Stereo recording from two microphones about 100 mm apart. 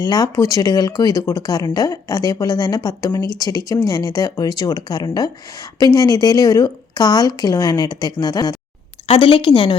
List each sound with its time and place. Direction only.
0.0 s speech: 40° left (ahead or behind)
9.0 s a woman's voice: 65° left (ahead or behind)